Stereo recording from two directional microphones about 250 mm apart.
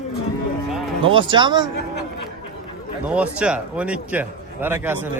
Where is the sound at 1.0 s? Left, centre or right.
Centre.